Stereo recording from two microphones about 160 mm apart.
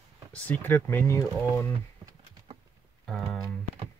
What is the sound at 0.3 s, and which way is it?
Speech, 10° left (ahead or behind).